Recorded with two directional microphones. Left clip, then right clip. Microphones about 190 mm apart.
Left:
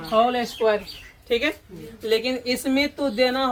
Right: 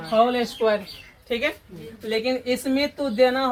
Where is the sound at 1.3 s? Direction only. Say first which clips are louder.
Left 2 dB; 35° left (ahead or behind).